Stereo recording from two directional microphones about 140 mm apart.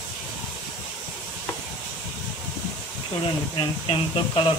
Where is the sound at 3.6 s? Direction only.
40° left (ahead or behind).